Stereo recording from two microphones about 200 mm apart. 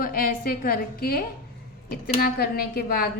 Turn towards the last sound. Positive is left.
turn(degrees=50)  # may be behind; listen again after turning